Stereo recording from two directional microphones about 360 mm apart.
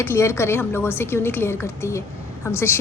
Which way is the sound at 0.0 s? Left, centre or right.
Centre.